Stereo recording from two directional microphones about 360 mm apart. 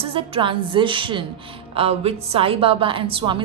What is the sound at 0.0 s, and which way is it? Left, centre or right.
A woman's voice, centre.